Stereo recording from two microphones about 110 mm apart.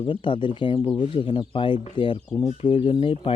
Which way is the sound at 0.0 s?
50° left (ahead or behind).